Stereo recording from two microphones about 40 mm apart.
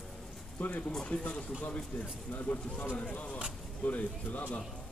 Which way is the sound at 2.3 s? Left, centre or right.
Left.